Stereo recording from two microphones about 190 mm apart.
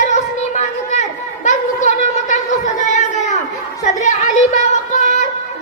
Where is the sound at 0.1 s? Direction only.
40° left (ahead or behind).